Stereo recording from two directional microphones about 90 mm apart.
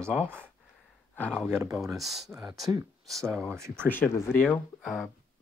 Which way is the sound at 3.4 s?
30° right (ahead or behind).